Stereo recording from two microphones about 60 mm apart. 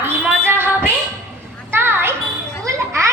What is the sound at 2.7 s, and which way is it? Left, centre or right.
Children playing, right.